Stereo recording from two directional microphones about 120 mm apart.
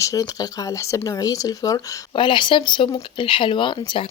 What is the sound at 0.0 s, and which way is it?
Speech, 30° left (ahead or behind).